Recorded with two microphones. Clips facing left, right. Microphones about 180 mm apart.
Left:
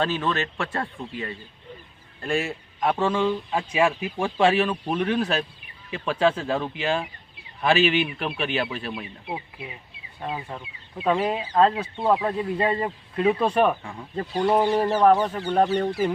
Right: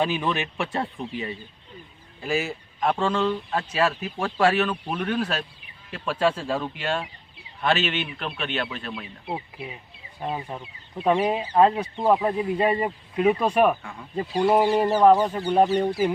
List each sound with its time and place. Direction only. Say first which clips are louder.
0.0 s speech: even; 15° right (ahead or behind)
2.2 s a man's voice: even; centre (ahead or behind)
10.2 s speech: right 1 dB; 15° right (ahead or behind)